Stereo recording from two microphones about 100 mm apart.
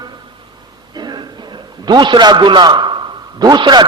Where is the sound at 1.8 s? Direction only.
45° right (ahead or behind).